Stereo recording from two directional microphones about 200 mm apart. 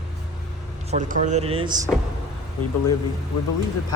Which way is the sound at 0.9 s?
40° right (ahead or behind).